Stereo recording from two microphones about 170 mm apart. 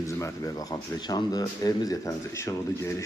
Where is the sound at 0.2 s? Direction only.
20° left (ahead or behind).